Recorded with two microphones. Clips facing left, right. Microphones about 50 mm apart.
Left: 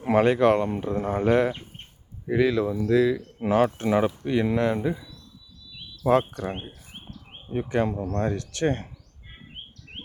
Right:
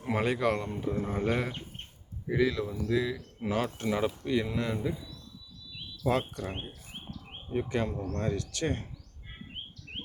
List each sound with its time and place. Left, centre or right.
0.1 s speech: left
2.3 s speech: left
3.4 s speech: left
4.4 s speech: left
6.0 s speech: left
7.7 s speech: left